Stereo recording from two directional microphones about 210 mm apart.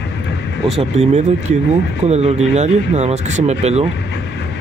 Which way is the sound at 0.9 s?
35° right (ahead or behind).